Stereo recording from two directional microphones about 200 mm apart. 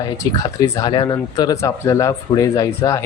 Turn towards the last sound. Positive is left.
turn(degrees=15)  # may be behind; listen again after turning